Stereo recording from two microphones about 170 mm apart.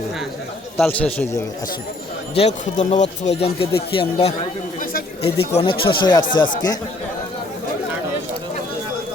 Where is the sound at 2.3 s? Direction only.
40° left (ahead or behind); by 6.4 s 25° left (ahead or behind).